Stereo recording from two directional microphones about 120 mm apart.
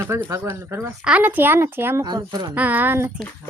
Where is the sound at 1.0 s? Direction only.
10° right (ahead or behind).